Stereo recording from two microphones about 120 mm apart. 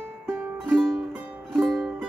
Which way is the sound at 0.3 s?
Centre (ahead or behind).